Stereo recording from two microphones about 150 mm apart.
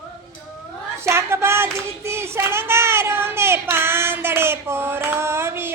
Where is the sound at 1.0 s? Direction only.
15° right (ahead or behind).